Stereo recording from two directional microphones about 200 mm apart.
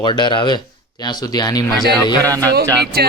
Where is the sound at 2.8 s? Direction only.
50° right (ahead or behind).